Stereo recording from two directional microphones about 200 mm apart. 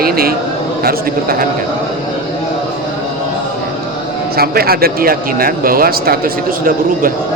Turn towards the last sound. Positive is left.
turn(degrees=-45)  # may be behind; listen again after turning